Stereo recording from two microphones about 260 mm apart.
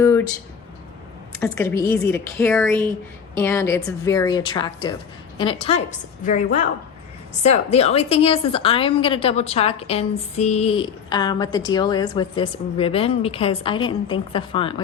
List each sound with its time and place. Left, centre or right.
0.0 s speech: centre
1.4 s a woman's voice: centre